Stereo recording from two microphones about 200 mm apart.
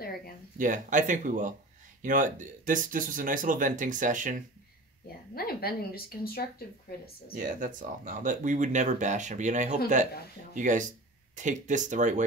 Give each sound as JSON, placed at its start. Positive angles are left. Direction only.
{"t": 0.6, "sound": "speech", "side_deg": -40}
{"t": 5.3, "sound": "speech", "side_deg": 50}
{"t": 7.3, "sound": "speech", "side_deg": -40}